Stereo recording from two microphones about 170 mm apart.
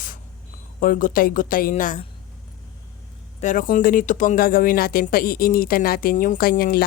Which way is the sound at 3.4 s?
50° left (ahead or behind).